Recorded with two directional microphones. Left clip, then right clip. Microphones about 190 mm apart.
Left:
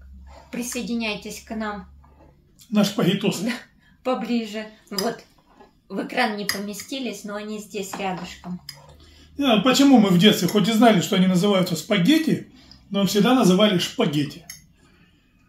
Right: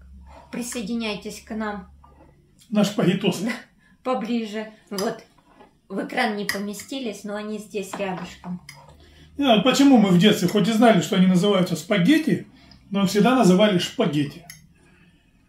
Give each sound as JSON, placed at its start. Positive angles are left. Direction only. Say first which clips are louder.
{"t": 0.5, "sound": "a woman's voice", "louder": "left 1 dB", "side_deg": -20}
{"t": 2.7, "sound": "speech", "louder": "even", "side_deg": 15}
{"t": 4.0, "sound": "a woman's voice", "louder": "even", "side_deg": -20}
{"t": 9.4, "sound": "speech", "louder": "right 1 dB", "side_deg": 10}